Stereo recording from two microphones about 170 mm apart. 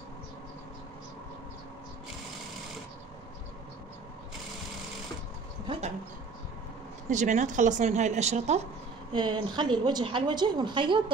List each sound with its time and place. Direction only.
7.1 s speech: 45° right (ahead or behind)
9.1 s a woman's voice: 25° right (ahead or behind)